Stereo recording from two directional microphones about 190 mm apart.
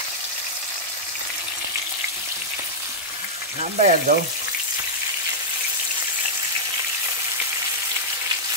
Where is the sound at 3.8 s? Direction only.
40° right (ahead or behind).